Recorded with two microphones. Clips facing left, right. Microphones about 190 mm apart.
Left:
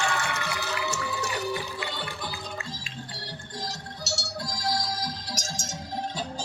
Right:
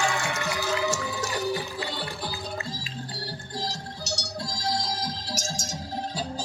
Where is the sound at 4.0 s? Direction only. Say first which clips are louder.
Even; 15° right (ahead or behind).